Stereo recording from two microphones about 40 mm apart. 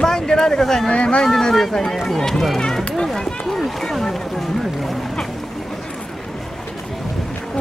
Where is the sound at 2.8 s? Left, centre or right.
Left.